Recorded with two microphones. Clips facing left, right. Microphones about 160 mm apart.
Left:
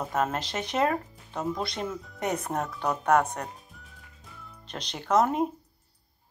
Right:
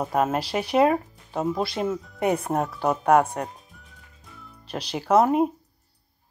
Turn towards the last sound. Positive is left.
turn(degrees=-10)  # may be behind; listen again after turning